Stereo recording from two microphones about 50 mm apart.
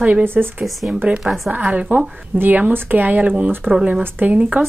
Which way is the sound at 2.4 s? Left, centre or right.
Right.